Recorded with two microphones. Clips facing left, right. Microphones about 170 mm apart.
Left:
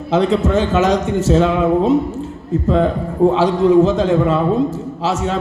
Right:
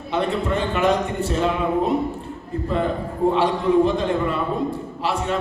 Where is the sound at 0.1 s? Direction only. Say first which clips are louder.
Left 7 dB; 90° left.